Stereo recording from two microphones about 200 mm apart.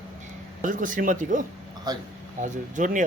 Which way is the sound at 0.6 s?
40° right (ahead or behind).